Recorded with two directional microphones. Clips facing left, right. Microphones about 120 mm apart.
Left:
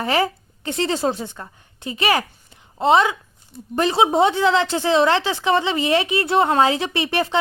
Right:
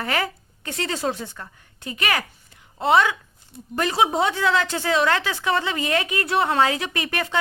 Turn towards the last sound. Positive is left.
turn(degrees=25)  # may be behind; listen again after turning